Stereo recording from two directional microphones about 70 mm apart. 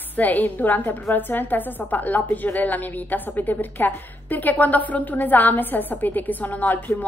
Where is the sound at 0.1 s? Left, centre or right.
Left.